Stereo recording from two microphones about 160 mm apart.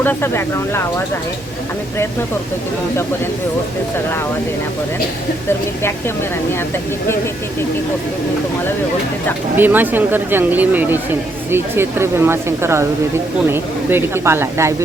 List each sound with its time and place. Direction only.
0.0 s speech: 15° left (ahead or behind)
9.6 s speech: 10° right (ahead or behind)